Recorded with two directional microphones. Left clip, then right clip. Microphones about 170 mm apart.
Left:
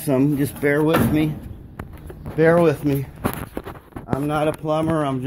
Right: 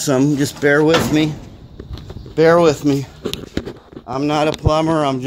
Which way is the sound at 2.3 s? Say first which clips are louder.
Right 4 dB; 35° right (ahead or behind).